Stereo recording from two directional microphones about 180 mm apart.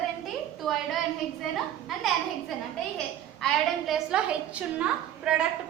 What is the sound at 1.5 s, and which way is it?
A woman's voice, centre (ahead or behind).